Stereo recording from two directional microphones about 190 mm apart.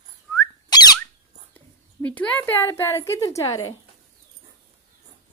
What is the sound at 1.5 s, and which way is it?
A woman's voice, 10° left (ahead or behind).